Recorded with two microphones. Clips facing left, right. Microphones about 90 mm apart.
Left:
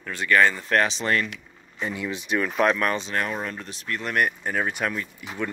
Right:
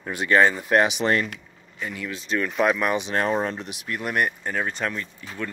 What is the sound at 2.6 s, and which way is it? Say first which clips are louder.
Speech: right 1 dB; 10° right (ahead or behind).